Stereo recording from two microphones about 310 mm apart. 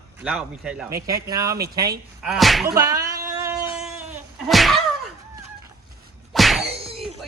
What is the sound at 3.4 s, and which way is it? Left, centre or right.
Insect, centre.